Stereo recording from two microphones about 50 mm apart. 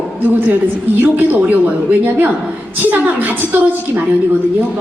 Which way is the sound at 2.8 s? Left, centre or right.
Right.